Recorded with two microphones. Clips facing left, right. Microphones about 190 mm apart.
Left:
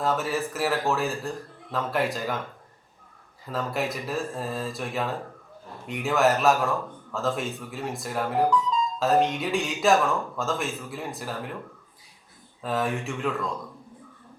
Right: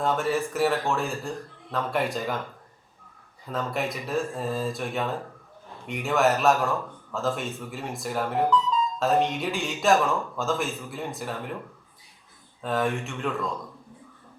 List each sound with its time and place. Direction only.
0.0 s a man's voice: centre (ahead or behind)
12.6 s a man's voice: centre (ahead or behind)